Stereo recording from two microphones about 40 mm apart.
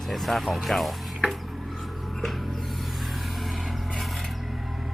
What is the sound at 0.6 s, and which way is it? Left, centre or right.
Speech, centre.